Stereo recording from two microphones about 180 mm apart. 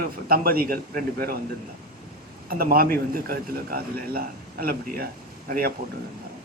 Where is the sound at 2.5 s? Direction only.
55° right (ahead or behind).